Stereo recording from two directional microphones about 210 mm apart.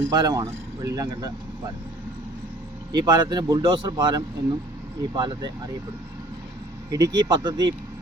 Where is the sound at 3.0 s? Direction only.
20° right (ahead or behind).